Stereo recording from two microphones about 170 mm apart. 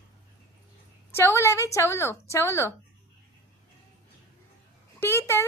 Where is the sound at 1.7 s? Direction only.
15° left (ahead or behind).